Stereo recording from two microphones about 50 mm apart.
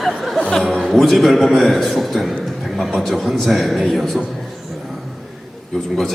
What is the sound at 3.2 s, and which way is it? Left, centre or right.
Speech, centre.